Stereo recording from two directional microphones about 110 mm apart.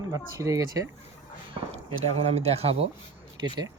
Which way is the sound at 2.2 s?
75° right (ahead or behind).